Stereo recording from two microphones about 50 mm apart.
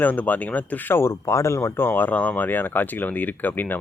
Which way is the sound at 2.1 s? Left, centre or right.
Left.